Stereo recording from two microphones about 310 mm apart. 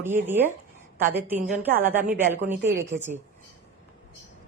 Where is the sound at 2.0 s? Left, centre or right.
Right.